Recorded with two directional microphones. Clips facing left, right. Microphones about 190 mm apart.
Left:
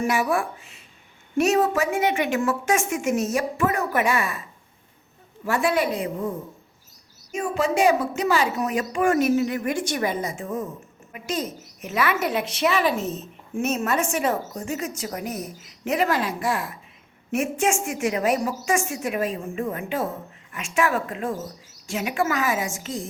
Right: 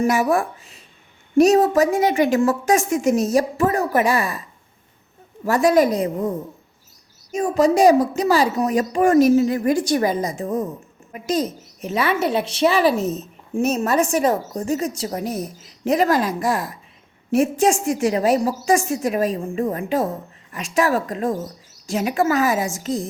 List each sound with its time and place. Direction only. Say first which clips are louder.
0.0 s speech: right 5 dB; 40° right (ahead or behind)
5.5 s speech: right 7 dB; 40° right (ahead or behind)
7.3 s speech: right 6 dB; 40° right (ahead or behind)